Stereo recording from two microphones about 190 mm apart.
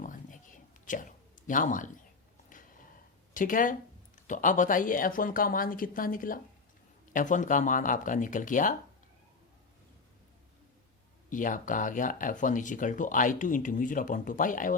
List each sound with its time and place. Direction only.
0.0 s whispering: 45° left (ahead or behind)
1.5 s speech: 45° left (ahead or behind)
2.5 s a sound: 45° left (ahead or behind)
3.3 s speech: 45° left (ahead or behind)
11.3 s speech: 45° left (ahead or behind)